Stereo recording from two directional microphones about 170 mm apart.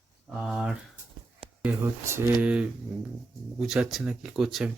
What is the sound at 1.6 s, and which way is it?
Speech, 15° right (ahead or behind).